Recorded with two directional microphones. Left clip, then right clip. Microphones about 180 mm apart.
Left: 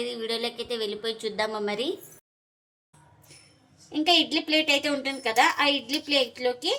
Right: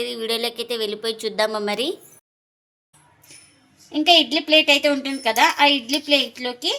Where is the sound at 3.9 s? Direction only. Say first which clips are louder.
Right 6 dB; 35° right (ahead or behind).